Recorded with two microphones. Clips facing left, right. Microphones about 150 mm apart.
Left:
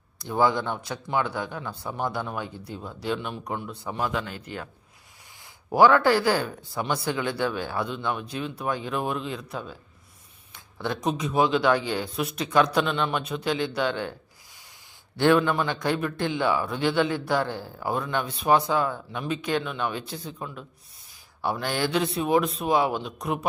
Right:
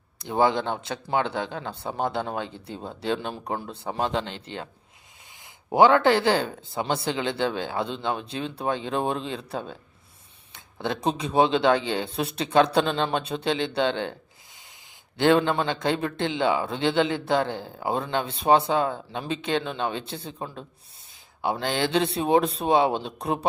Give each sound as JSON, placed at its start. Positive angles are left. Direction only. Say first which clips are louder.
{"t": 0.3, "sound": "a man's voice", "louder": "right 1 dB", "side_deg": -20}
{"t": 5.7, "sound": "a man's voice", "louder": "right 1 dB", "side_deg": -20}
{"t": 15.2, "sound": "a man's voice", "louder": "even", "side_deg": -25}
{"t": 21.4, "sound": "a man's voice", "louder": "right 1 dB", "side_deg": -20}